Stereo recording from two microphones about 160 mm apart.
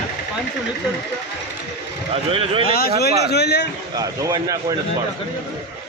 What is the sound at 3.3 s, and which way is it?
Speech, 90° left.